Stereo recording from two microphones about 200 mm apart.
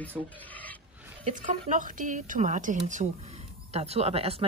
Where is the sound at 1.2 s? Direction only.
40° right (ahead or behind).